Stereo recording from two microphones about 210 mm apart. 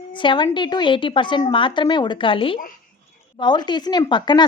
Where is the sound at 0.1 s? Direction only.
25° left (ahead or behind).